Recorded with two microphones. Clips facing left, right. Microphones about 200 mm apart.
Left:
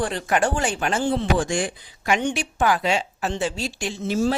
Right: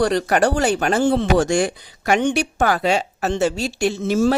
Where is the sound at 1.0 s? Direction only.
70° right (ahead or behind).